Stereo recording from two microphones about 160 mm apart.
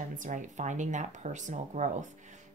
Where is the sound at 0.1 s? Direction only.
55° right (ahead or behind).